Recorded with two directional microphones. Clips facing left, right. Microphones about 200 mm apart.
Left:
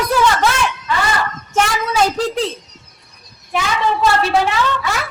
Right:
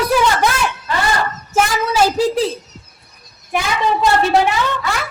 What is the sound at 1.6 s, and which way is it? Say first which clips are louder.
Speech: right 1 dB; 5° right (ahead or behind).